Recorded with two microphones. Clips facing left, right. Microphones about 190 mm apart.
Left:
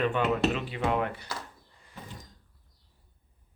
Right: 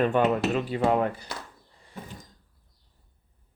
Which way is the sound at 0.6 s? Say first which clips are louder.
Right 5 dB; 40° right (ahead or behind).